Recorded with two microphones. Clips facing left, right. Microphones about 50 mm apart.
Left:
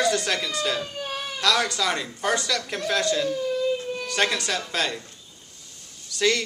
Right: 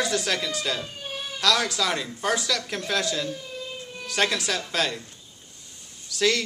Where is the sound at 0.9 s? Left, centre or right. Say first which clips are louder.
Left 4 dB; left.